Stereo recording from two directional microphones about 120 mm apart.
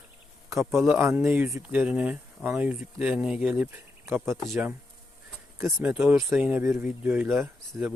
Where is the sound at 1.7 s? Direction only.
10° right (ahead or behind).